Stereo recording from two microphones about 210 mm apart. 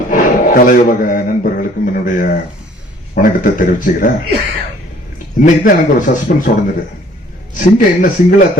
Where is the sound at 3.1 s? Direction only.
40° left (ahead or behind).